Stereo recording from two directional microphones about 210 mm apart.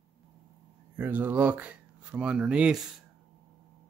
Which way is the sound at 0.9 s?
10° right (ahead or behind).